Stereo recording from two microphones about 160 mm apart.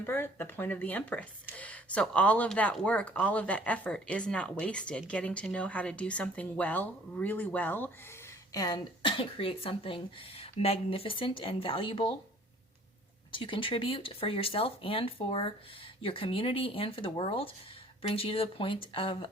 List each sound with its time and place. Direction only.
0.0 s speech: 15° left (ahead or behind)
8.5 s speech: 25° left (ahead or behind)
13.3 s speech: 30° left (ahead or behind)